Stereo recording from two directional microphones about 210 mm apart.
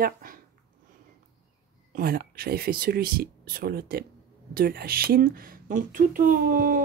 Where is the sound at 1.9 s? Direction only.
45° right (ahead or behind).